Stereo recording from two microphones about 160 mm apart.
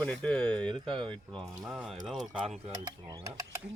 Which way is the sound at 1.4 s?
20° right (ahead or behind).